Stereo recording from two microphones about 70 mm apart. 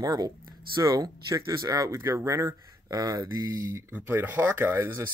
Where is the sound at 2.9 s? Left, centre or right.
Right.